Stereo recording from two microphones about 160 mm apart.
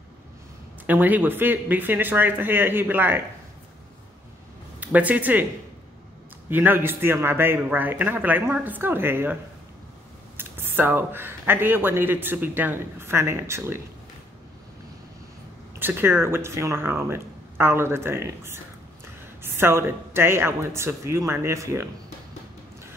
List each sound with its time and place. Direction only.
0.8 s speech: 10° right (ahead or behind)
4.7 s speech: 10° right (ahead or behind)
6.5 s speech: 10° right (ahead or behind)
15.8 s speech: 15° right (ahead or behind)